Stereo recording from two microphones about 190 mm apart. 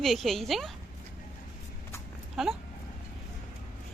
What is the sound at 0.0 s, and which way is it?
Speech, centre (ahead or behind).